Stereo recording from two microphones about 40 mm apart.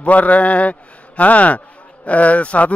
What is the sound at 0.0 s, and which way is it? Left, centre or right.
A man's voice, left.